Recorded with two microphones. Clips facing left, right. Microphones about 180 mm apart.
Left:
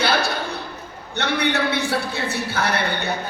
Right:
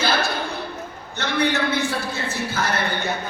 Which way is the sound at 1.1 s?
65° left (ahead or behind).